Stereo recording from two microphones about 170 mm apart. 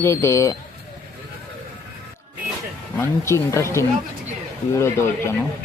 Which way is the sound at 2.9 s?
15° left (ahead or behind).